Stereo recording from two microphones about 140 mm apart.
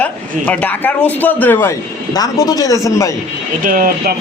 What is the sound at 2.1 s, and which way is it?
Speech, 25° left (ahead or behind).